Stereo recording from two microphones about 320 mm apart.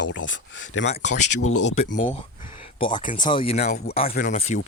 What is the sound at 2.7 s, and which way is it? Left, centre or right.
Speech, centre.